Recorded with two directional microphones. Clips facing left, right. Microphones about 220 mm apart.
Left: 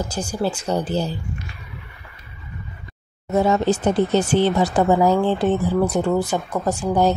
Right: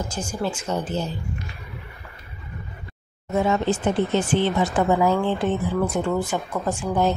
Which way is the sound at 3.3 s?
40° left (ahead or behind).